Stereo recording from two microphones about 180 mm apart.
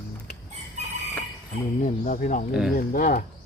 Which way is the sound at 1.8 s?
45° left (ahead or behind).